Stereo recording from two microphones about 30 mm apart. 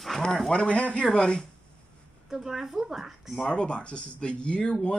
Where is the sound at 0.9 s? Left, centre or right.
Left.